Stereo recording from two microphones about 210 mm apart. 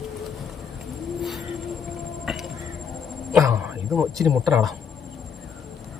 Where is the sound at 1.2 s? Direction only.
Centre (ahead or behind).